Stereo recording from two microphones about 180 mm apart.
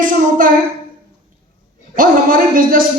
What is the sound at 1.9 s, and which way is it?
Speech, 50° right (ahead or behind).